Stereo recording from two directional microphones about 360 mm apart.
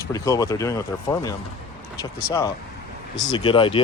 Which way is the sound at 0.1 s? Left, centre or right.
Centre.